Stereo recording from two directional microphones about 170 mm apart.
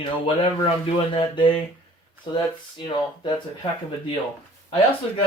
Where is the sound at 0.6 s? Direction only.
30° left (ahead or behind).